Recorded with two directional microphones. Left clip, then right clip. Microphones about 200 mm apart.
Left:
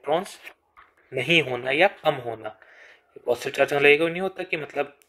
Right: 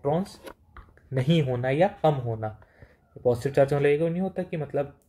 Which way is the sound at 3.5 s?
35° left (ahead or behind).